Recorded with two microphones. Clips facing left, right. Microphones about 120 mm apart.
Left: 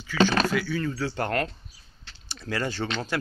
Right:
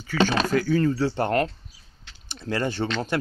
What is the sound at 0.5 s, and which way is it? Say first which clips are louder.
Speech: right 6 dB; 40° right (ahead or behind).